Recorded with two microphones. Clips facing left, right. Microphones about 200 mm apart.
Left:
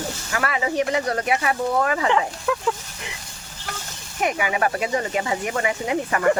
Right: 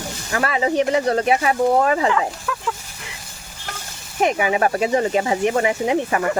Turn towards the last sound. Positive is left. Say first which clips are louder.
# right 4 dB
turn(degrees=-25)  # may be behind; listen again after turning